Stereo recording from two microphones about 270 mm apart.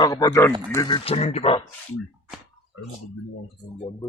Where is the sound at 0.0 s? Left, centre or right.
Centre.